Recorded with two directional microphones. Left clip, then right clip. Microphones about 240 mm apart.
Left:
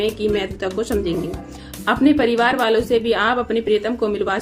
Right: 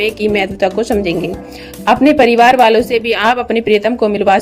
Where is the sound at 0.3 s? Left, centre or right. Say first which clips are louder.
Right 9 dB; right.